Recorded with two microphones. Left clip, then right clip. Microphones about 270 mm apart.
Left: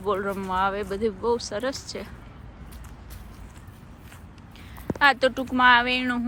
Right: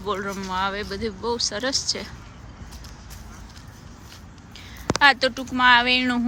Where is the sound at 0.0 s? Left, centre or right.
Centre.